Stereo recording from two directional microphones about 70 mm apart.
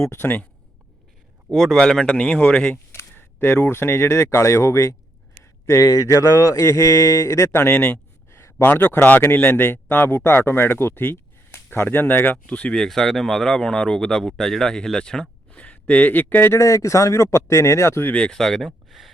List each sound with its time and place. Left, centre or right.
0.0 s speech: left
1.5 s speech: centre
1.8 s speech: centre
2.9 s speech: left
5.4 s a sound: left
5.9 s speech: left
8.3 s a sound: left
8.6 s speech: left
12.5 s speech: centre
16.6 s speech: left
18.1 s speech: centre